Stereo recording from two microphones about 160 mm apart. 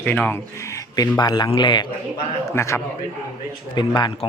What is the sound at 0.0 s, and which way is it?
Speech, 10° left (ahead or behind).